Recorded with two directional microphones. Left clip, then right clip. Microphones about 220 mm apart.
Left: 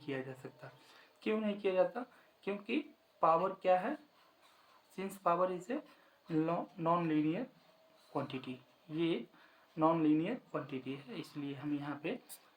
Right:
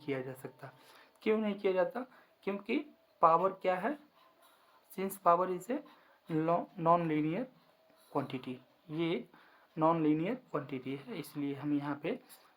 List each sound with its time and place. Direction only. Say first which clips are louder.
0.0 s speech: right 3 dB; 40° right (ahead or behind)
4.9 s speech: right 4 dB; 40° right (ahead or behind)